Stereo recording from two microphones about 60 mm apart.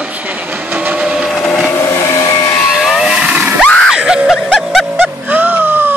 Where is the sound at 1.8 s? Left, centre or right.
Left.